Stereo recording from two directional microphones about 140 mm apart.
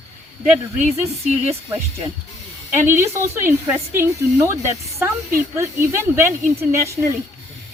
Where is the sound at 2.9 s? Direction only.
15° right (ahead or behind).